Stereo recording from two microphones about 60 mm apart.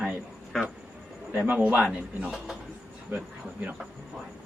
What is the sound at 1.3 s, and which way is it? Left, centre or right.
A man's voice, right.